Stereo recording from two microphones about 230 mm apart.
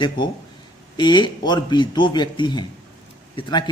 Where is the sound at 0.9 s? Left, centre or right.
Centre.